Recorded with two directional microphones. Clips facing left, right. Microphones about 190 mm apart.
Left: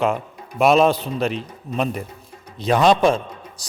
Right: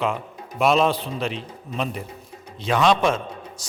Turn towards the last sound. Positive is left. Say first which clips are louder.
# right 1 dB
turn(degrees=35)  # may be behind; listen again after turning